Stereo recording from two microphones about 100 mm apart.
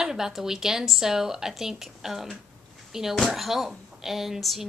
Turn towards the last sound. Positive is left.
turn(degrees=0)  # may be behind; listen again after turning